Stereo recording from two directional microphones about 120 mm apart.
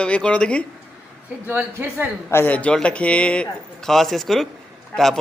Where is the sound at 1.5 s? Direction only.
20° right (ahead or behind).